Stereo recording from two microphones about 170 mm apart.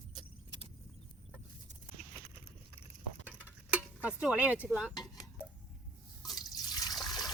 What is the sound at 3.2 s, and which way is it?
Stir, 10° right (ahead or behind).